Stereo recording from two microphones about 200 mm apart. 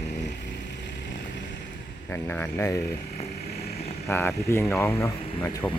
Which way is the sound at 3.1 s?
30° left (ahead or behind).